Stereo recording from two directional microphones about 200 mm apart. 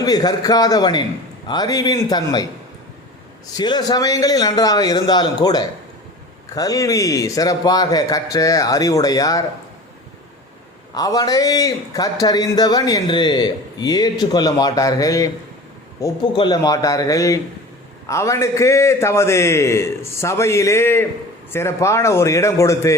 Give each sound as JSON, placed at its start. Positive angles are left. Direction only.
{"t": 0.0, "sound": "a man's voice", "side_deg": 20}
{"t": 10.9, "sound": "a man's voice", "side_deg": 20}